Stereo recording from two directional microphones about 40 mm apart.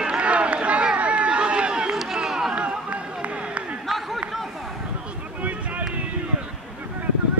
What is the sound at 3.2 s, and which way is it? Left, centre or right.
Run, right.